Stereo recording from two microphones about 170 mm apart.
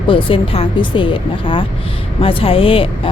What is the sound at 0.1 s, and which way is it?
Speech, 30° left (ahead or behind).